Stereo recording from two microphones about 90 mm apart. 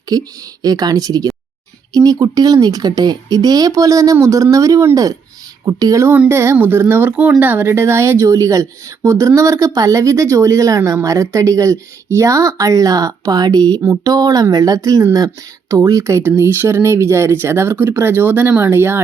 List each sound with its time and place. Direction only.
0.1 s speech: 45° right (ahead or behind)
6.1 s speech: 25° right (ahead or behind)